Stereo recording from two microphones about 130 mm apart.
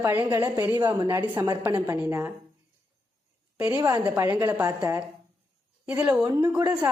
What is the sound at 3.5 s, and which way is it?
A woman's voice, 25° right (ahead or behind).